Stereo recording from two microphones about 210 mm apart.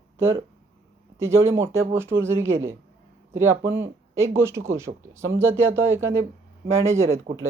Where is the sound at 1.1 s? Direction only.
10° right (ahead or behind).